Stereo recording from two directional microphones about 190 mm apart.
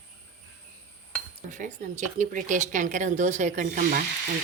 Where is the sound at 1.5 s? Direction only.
40° right (ahead or behind).